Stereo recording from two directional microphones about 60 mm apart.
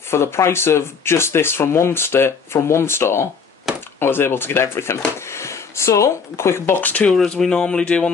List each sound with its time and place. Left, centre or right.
0.1 s speech: left
6.8 s speech: left
7.2 s speech: centre